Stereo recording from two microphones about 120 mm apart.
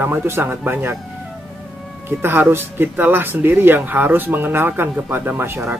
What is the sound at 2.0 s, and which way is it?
Speech, 15° right (ahead or behind).